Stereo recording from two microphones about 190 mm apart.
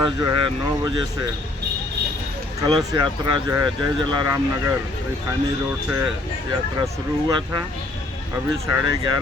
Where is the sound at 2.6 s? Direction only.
20° right (ahead or behind).